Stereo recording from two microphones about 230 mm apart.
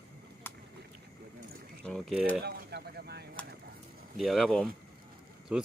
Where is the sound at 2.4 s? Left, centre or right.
Right.